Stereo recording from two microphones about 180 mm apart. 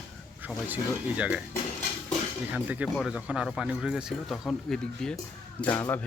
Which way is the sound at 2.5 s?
10° right (ahead or behind).